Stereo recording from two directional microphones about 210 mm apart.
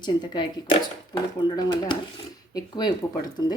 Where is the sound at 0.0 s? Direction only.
20° left (ahead or behind).